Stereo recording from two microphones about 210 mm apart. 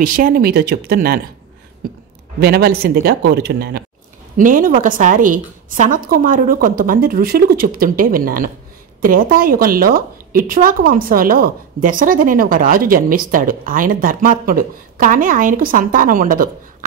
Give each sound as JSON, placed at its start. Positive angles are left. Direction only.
{"t": 0.0, "sound": "speech", "side_deg": -40}
{"t": 2.4, "sound": "a woman's voice", "side_deg": -45}